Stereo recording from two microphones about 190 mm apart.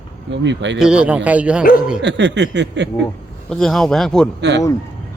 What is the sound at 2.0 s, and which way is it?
Speech, 70° right (ahead or behind).